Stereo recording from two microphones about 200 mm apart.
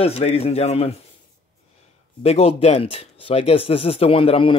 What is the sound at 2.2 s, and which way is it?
Speech, 30° left (ahead or behind).